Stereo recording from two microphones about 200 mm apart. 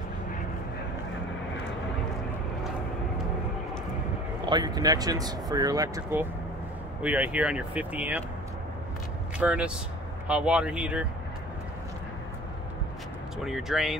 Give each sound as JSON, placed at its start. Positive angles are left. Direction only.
{"t": 4.5, "sound": "speech", "side_deg": -20}
{"t": 9.4, "sound": "speech", "side_deg": -5}
{"t": 13.4, "sound": "speech", "side_deg": 0}